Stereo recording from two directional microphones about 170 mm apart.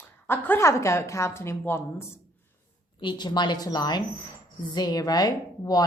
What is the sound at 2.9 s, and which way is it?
A woman's voice, 25° left (ahead or behind).